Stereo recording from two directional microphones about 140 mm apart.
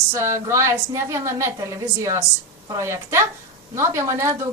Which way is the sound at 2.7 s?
20° right (ahead or behind).